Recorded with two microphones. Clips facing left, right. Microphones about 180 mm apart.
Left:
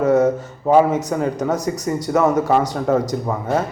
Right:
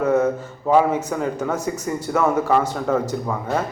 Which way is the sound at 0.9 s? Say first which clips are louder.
Left 3 dB; 40° left (ahead or behind).